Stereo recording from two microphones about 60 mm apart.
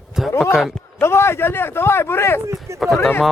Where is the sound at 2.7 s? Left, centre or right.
Right.